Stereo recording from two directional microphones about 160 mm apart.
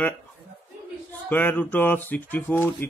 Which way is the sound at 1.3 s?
10° left (ahead or behind).